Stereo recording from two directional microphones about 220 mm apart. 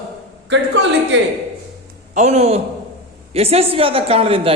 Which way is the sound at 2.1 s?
30° right (ahead or behind).